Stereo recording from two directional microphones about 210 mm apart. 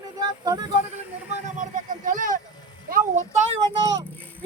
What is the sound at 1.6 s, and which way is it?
Vehicle, 40° right (ahead or behind).